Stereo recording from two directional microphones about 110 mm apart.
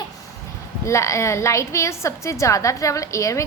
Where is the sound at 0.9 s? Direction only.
25° left (ahead or behind).